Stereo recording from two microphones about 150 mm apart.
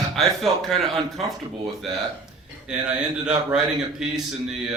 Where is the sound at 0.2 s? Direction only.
Centre (ahead or behind).